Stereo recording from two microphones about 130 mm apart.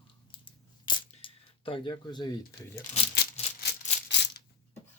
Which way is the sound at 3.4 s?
55° left (ahead or behind).